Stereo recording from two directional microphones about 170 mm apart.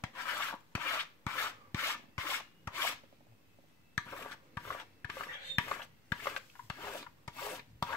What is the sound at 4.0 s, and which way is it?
Filing, 15° left (ahead or behind).